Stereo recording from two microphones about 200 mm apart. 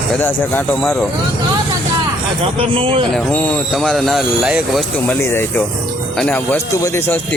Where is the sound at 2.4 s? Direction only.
25° right (ahead or behind).